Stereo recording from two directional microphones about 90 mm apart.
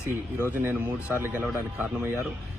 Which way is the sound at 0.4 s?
20° right (ahead or behind).